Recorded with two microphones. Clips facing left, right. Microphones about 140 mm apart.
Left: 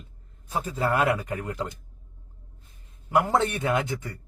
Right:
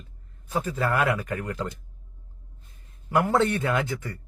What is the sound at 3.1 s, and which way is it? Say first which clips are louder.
Speech: right 1 dB; 20° left (ahead or behind).